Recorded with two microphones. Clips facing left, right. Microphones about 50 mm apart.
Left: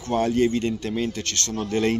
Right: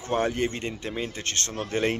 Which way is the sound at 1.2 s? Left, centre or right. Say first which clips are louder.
Left 3 dB; right.